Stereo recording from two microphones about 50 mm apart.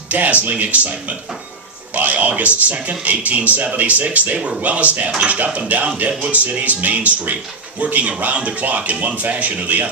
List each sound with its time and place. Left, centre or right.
0.1 s a man's voice: right
2.0 s a man's voice: right